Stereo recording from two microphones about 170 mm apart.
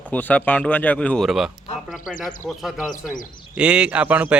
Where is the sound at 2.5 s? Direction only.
Centre (ahead or behind).